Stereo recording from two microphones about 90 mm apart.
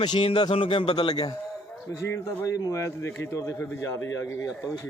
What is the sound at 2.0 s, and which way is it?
A man's voice, 30° left (ahead or behind).